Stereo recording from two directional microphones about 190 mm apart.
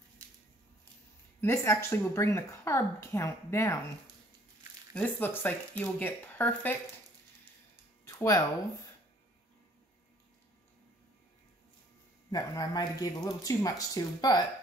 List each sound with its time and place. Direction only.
1.4 s a woman's voice: 15° left (ahead or behind)
4.9 s a woman's voice: 10° left (ahead or behind)
8.0 s a sound: 15° left (ahead or behind)
12.3 s speech: 20° left (ahead or behind)